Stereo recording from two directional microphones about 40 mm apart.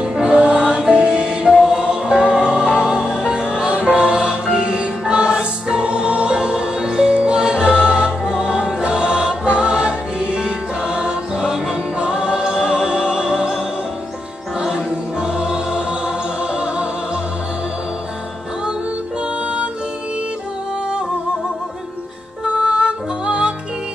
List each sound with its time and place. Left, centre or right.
0.2 s music: right
15.1 s music: centre
19.2 s music: right
22.6 s music: centre